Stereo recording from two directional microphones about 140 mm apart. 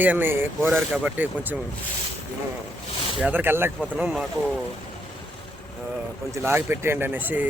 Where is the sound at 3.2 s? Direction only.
10° right (ahead or behind).